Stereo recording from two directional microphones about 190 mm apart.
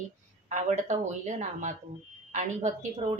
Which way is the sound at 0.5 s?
40° right (ahead or behind).